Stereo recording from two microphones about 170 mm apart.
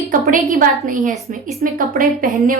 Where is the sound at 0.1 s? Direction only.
55° right (ahead or behind).